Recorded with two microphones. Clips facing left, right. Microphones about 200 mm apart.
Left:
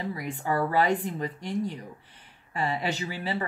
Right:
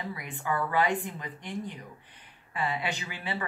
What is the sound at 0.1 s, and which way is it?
Speech, 35° left (ahead or behind).